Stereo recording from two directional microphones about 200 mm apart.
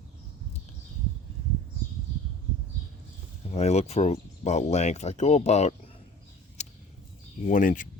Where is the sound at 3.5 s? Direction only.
35° left (ahead or behind).